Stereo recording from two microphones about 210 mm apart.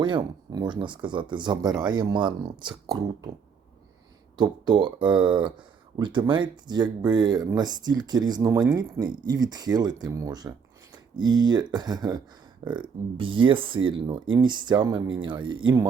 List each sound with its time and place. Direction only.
0.0 s speech: 20° right (ahead or behind)
4.4 s speech: 20° right (ahead or behind)